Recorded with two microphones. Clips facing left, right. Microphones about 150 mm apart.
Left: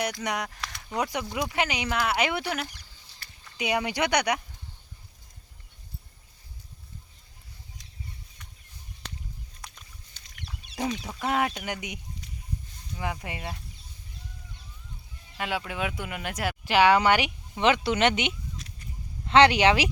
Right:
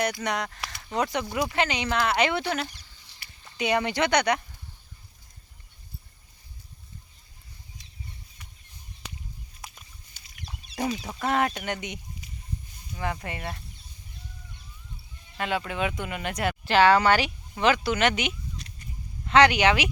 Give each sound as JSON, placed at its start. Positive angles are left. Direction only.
{"t": 0.2, "sound": "speech", "side_deg": 10}
{"t": 0.6, "sound": "a sound", "side_deg": -5}
{"t": 0.9, "sound": "speech", "side_deg": 10}
{"t": 1.2, "sound": "speech", "side_deg": -5}
{"t": 1.5, "sound": "speech", "side_deg": 10}
{"t": 9.6, "sound": "a sound", "side_deg": -10}
{"t": 10.8, "sound": "speech", "side_deg": -10}
{"t": 11.2, "sound": "speech", "side_deg": 10}
{"t": 12.2, "sound": "a sound", "side_deg": -10}
{"t": 13.0, "sound": "speech", "side_deg": 10}
{"t": 15.4, "sound": "speech", "side_deg": 5}
{"t": 18.6, "sound": "a sound", "side_deg": 0}
{"t": 19.2, "sound": "speech", "side_deg": 25}